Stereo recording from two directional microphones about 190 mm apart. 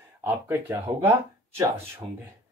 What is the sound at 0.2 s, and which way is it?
Speech, 10° right (ahead or behind).